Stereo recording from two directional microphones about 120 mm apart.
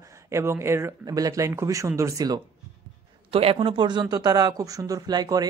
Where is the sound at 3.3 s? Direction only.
55° right (ahead or behind).